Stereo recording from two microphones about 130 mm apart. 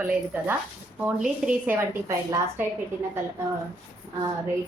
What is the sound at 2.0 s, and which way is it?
Speech, 25° right (ahead or behind).